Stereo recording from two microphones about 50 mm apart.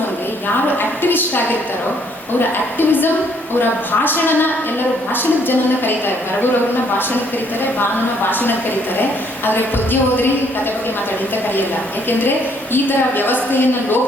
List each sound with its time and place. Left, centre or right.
0.8 s a woman's voice: left
2.7 s a woman's voice: left
8.3 s a woman's voice: left
12.7 s a woman's voice: left